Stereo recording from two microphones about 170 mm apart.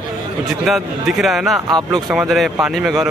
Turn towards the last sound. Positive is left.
turn(degrees=0)  # may be behind; listen again after turning